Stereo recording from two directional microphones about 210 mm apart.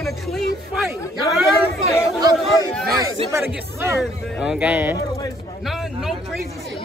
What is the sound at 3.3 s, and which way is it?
A man's voice, 10° right (ahead or behind).